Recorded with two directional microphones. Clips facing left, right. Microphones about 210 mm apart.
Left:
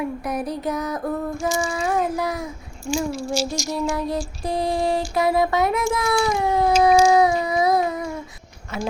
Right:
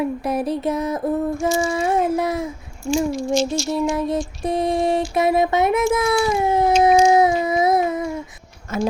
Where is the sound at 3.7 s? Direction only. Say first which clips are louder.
Right 3 dB; 25° right (ahead or behind).